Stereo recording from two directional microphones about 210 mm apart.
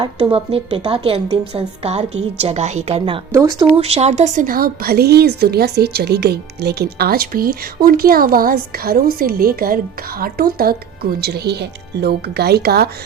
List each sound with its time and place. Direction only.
0.0 s a woman's voice: 25° right (ahead or behind)
3.3 s speech: 15° right (ahead or behind)
3.8 s a woman's voice: 30° right (ahead or behind); by 12.9 s 50° right (ahead or behind)